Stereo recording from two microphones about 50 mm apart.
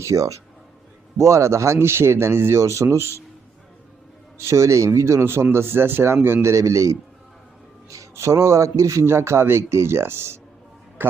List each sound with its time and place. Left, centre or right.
0.0 s a man's voice: right
1.2 s a man's voice: right
4.4 s a man's voice: right
6.4 s a man's voice: right
7.9 s a man's voice: right